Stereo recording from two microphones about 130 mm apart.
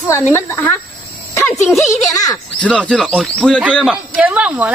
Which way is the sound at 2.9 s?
5° left (ahead or behind).